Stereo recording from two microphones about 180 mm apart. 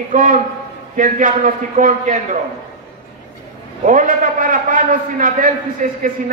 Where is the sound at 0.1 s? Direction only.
45° right (ahead or behind).